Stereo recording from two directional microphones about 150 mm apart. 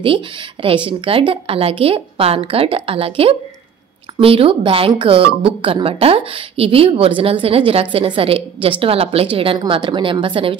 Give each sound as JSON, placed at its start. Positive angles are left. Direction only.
{"t": 0.0, "sound": "speech", "side_deg": -35}